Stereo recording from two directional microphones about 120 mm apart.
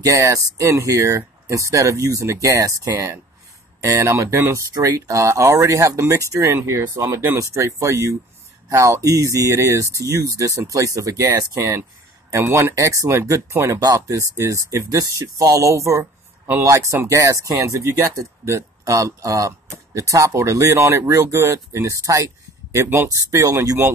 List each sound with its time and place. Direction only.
0.0 s speech: 25° right (ahead or behind)